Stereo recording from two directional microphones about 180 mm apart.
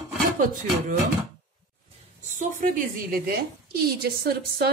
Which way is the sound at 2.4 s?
45° right (ahead or behind).